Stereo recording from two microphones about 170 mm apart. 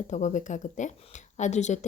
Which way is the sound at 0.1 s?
45° left (ahead or behind).